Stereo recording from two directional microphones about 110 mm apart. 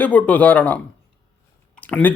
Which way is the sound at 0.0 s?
15° left (ahead or behind).